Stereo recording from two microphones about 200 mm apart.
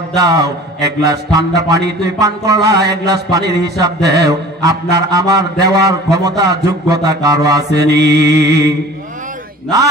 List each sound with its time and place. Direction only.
0.2 s mantra: 15° right (ahead or behind)
7.7 s music: 55° right (ahead or behind)